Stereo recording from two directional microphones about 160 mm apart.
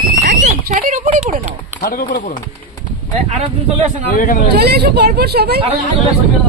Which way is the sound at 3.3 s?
40° right (ahead or behind).